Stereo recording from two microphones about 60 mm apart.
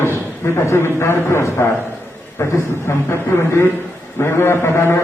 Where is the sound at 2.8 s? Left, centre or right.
Left.